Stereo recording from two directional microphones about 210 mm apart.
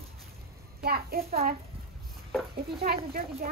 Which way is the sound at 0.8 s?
45° right (ahead or behind).